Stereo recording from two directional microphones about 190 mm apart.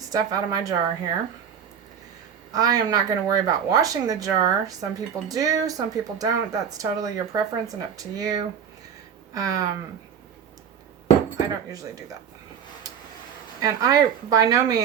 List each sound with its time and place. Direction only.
0.1 s speech: 20° right (ahead or behind)
2.5 s speech: 20° right (ahead or behind)
11.3 s speech: 20° right (ahead or behind)
13.6 s speech: 20° right (ahead or behind)